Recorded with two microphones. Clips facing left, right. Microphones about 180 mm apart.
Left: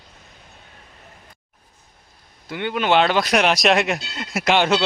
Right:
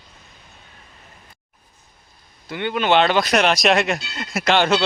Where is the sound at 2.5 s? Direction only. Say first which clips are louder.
Right 1 dB; 5° left (ahead or behind).